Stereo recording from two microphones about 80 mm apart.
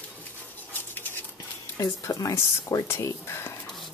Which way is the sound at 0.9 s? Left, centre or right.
Left.